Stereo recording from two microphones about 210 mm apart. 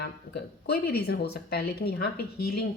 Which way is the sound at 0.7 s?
50° left (ahead or behind).